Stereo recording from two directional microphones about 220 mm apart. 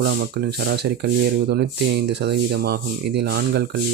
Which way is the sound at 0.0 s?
50° right (ahead or behind).